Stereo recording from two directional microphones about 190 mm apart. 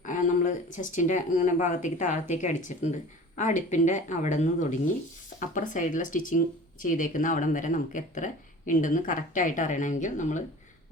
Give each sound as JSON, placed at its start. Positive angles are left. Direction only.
{"t": 0.0, "sound": "speech", "side_deg": 40}